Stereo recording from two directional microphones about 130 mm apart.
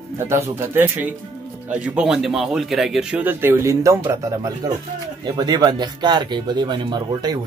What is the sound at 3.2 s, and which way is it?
Speech, 15° right (ahead or behind).